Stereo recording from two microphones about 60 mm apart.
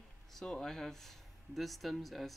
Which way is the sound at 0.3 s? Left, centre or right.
Centre.